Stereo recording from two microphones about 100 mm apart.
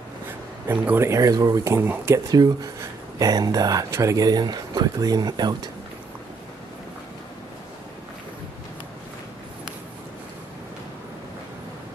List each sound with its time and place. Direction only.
0.7 s speech: 25° right (ahead or behind)
1.6 s speech: 25° right (ahead or behind)
2.3 s speech: 40° right (ahead or behind)